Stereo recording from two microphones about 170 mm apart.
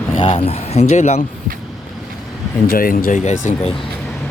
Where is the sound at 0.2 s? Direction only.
30° left (ahead or behind).